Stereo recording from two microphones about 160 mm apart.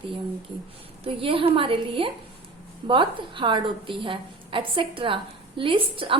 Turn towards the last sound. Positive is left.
turn(degrees=-35)  # may be behind; listen again after turning